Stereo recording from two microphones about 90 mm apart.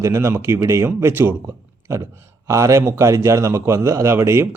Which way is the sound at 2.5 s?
30° right (ahead or behind).